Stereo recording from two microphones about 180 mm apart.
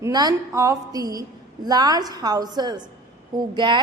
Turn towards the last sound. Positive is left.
turn(degrees=-25)  # may be behind; listen again after turning